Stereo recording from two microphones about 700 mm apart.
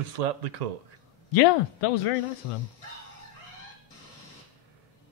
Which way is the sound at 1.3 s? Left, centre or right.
Left.